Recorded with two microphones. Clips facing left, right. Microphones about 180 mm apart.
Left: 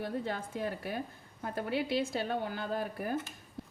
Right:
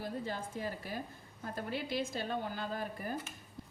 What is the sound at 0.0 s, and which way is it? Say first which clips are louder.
A woman's voice: left 3 dB; 65° left (ahead or behind).